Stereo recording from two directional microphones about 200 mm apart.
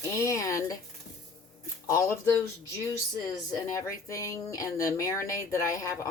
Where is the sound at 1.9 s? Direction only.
15° left (ahead or behind).